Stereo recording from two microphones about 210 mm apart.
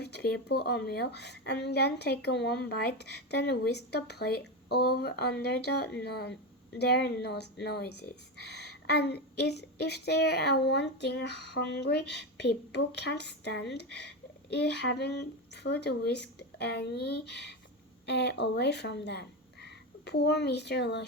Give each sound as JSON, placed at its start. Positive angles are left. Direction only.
{"t": 0.0, "sound": "speech", "side_deg": 50}